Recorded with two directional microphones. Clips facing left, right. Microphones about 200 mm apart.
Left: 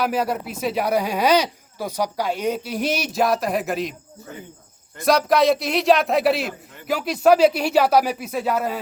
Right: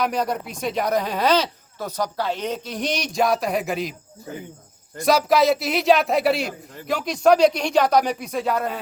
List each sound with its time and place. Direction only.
0.0 s speech: 5° left (ahead or behind)
4.9 s speech: centre (ahead or behind)